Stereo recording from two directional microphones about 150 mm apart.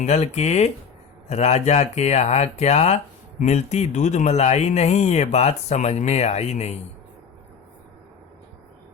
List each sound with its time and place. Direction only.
0.0 s speech: 45° left (ahead or behind)